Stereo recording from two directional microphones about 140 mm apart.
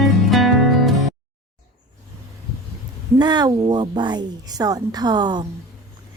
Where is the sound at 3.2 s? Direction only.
30° right (ahead or behind).